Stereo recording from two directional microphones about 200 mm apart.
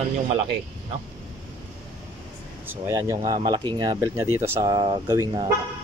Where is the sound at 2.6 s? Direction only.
10° right (ahead or behind).